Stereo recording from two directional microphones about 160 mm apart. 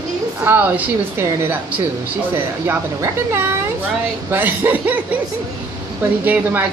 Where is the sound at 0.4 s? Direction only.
10° right (ahead or behind).